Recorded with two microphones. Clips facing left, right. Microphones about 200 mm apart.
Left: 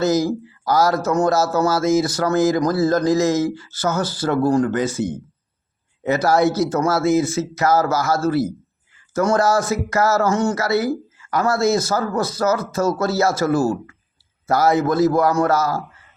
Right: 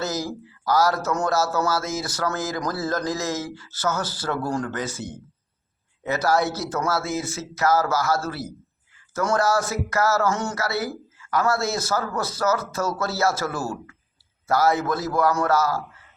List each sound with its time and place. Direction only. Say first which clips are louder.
0.0 s speech: left 10 dB; 15° left (ahead or behind)
13.5 s speech: left 11 dB; 45° left (ahead or behind)
14.4 s a man's voice: left 4 dB; 15° left (ahead or behind)